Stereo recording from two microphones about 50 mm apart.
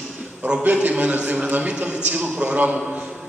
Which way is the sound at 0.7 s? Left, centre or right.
Right.